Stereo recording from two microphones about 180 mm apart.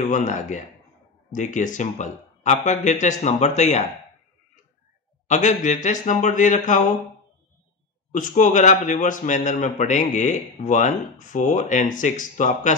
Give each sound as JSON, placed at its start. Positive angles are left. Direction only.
{"t": 0.0, "sound": "a man's voice", "side_deg": 45}
{"t": 5.3, "sound": "a man's voice", "side_deg": 40}
{"t": 8.1, "sound": "a man's voice", "side_deg": 45}